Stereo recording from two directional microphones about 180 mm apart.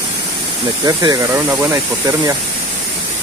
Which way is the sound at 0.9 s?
20° right (ahead or behind).